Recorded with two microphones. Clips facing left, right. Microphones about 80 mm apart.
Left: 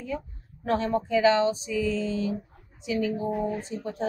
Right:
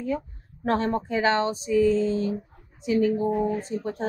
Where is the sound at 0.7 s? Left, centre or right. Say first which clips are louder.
Right 1 dB; right.